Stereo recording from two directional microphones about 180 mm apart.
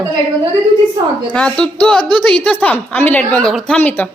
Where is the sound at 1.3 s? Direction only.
5° left (ahead or behind).